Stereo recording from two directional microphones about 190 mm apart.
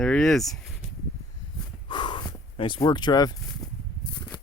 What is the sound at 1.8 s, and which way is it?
Snort, 25° left (ahead or behind).